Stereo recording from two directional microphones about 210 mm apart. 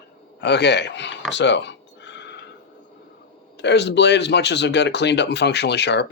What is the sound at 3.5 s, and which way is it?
Speech, 55° left (ahead or behind).